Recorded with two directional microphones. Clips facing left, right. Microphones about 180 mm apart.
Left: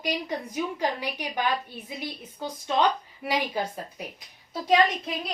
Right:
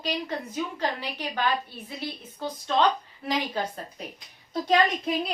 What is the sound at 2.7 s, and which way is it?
A woman's voice, 15° left (ahead or behind).